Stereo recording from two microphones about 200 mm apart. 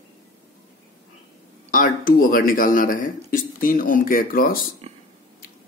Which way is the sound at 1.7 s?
45° left (ahead or behind).